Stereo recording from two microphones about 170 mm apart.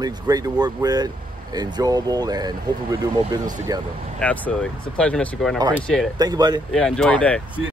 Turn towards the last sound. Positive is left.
turn(degrees=10)  # may be behind; listen again after turning